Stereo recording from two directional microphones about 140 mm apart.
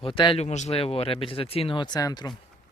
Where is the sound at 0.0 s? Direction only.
35° left (ahead or behind).